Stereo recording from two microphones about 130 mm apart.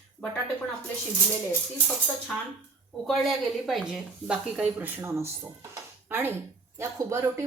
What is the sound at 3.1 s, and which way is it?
Speech, centre (ahead or behind).